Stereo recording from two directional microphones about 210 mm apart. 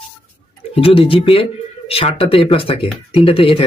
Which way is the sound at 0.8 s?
25° left (ahead or behind).